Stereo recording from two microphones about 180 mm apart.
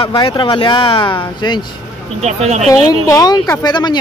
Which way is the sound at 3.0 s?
20° left (ahead or behind).